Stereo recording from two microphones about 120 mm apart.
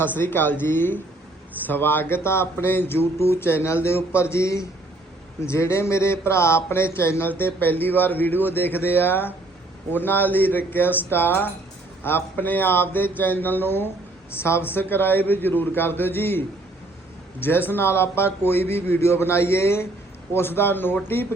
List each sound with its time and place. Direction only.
0.0 s a man's voice: 15° left (ahead or behind)
17.4 s a man's voice: 20° left (ahead or behind)